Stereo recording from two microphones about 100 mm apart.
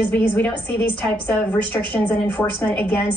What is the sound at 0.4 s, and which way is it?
A woman's voice, 20° left (ahead or behind).